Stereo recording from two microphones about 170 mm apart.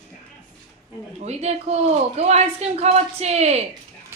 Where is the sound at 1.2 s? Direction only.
40° right (ahead or behind).